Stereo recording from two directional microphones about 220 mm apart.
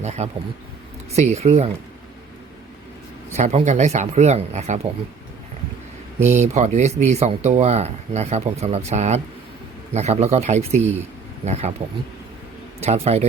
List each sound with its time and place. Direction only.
0.0 s speech: 30° right (ahead or behind)
3.3 s speech: 30° right (ahead or behind)
6.4 s speech: 30° right (ahead or behind)